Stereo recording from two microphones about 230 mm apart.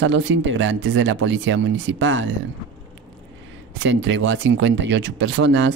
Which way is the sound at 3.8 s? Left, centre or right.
Right.